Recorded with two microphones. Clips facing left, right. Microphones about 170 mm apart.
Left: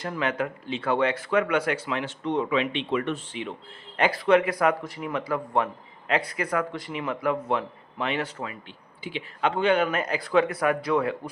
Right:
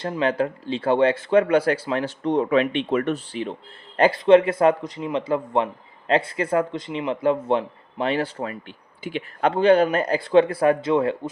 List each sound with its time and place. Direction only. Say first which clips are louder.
0.0 s speech: right 5 dB; 30° right (ahead or behind)
8.4 s speech: right 6 dB; 50° right (ahead or behind)
9.6 s speech: right 7 dB; 35° right (ahead or behind)